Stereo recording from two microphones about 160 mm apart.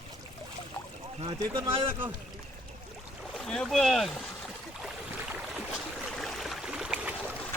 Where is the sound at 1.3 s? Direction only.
30° right (ahead or behind).